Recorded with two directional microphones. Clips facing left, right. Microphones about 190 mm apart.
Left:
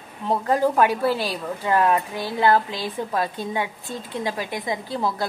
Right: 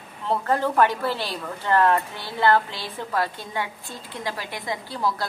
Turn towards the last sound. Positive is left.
turn(degrees=20)  # may be behind; listen again after turning